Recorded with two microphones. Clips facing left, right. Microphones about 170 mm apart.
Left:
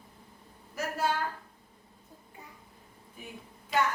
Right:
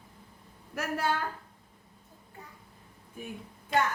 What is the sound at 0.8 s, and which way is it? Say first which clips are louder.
Speech: even; 60° right (ahead or behind).